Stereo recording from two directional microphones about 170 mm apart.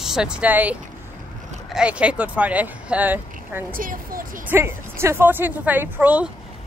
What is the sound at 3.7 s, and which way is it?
Speech, 55° right (ahead or behind).